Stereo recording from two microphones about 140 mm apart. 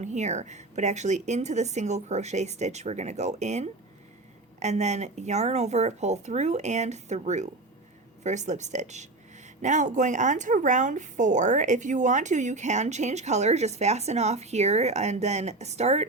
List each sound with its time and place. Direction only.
0.0 s speech: 55° right (ahead or behind)